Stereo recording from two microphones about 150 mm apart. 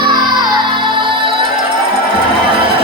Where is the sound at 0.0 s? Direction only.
30° right (ahead or behind).